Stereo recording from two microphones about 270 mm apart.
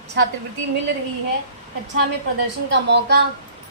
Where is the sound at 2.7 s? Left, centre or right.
Right.